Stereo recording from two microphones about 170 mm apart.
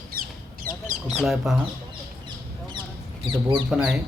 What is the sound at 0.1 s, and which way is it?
Bird, 60° right (ahead or behind).